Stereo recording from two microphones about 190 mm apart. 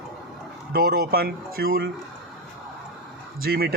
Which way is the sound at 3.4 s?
55° right (ahead or behind).